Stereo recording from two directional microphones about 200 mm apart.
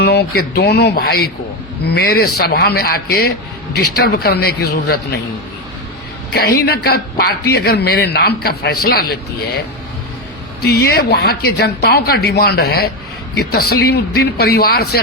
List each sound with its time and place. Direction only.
0.0 s speech: 55° left (ahead or behind)
6.3 s speech: 50° left (ahead or behind)
10.6 s speech: 55° left (ahead or behind)